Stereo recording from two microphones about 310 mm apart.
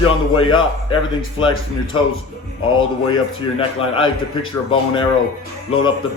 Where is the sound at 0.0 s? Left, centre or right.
Centre.